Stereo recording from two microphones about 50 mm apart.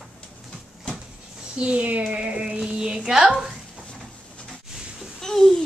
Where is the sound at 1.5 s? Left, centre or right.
Right.